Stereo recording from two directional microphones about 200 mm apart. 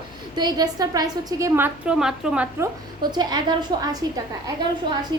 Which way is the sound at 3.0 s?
20° right (ahead or behind).